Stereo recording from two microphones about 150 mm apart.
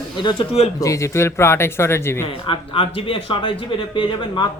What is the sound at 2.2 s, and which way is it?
Speech, 35° left (ahead or behind).